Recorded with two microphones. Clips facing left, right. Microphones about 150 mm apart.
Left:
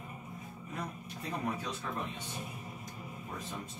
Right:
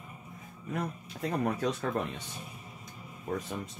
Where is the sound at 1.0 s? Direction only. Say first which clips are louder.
Right 6 dB; 75° right (ahead or behind).